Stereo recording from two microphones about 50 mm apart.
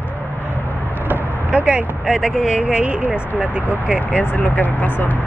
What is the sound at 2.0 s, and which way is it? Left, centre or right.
Speech, centre.